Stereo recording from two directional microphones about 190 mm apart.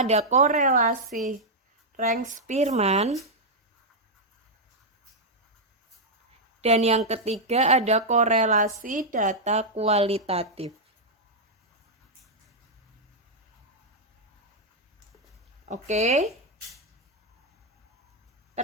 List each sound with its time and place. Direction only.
0.0 s speech: 35° right (ahead or behind)
2.0 s speech: 45° right (ahead or behind)
6.6 s a woman's voice: 35° right (ahead or behind)
15.6 s speech: 35° right (ahead or behind)